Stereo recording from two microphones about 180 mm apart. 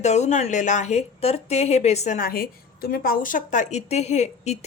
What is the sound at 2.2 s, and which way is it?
A woman's voice, 55° left (ahead or behind).